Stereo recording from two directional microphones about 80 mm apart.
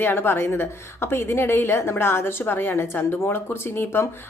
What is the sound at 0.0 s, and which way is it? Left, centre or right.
A woman's voice, left.